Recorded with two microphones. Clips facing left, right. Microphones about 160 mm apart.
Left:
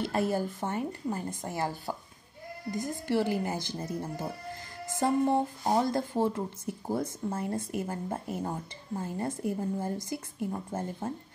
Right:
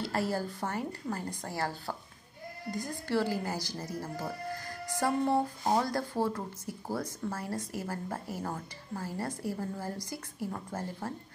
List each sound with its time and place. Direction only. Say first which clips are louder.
0.0 s a woman's voice: left 3 dB; 20° left (ahead or behind)